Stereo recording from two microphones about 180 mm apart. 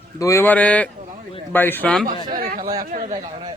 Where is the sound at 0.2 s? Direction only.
15° left (ahead or behind).